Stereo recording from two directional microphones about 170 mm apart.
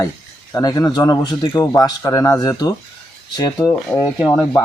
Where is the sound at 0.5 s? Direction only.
20° left (ahead or behind).